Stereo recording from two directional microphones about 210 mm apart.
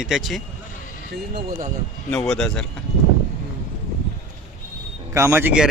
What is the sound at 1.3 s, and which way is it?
Speech, 50° right (ahead or behind).